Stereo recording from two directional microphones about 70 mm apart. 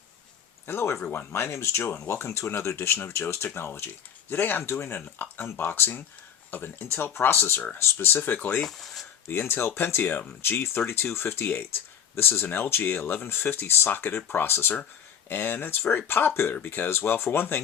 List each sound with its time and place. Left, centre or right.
0.7 s speech: left
8.6 s speech: centre
9.4 s speech: left